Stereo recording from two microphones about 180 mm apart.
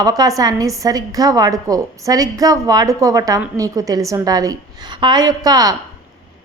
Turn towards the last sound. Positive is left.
turn(degrees=-20)  # may be behind; listen again after turning